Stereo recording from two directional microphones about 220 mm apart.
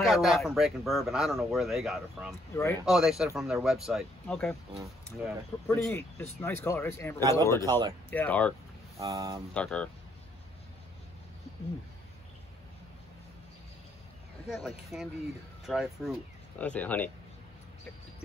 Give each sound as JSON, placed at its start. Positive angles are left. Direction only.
{"t": 0.0, "sound": "speech", "side_deg": 0}
{"t": 2.5, "sound": "speech", "side_deg": 10}
{"t": 2.8, "sound": "speech", "side_deg": 0}
{"t": 5.7, "sound": "speech", "side_deg": 10}
{"t": 8.9, "sound": "speech", "side_deg": -15}
{"t": 9.5, "sound": "speech", "side_deg": 5}
{"t": 14.5, "sound": "speech", "side_deg": 0}